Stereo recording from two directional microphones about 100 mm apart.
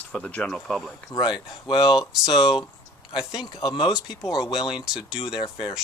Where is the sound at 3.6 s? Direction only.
55° left (ahead or behind).